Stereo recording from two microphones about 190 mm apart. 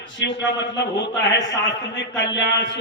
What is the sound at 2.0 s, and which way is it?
Speech, 70° left (ahead or behind).